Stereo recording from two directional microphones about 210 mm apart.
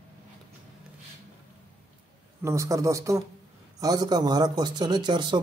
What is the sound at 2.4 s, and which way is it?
A man's voice, 15° right (ahead or behind).